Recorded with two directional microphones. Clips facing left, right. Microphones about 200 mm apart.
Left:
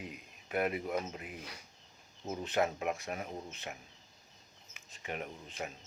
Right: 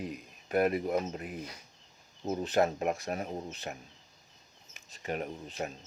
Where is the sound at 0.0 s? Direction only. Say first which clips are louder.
Right 7 dB; 40° right (ahead or behind).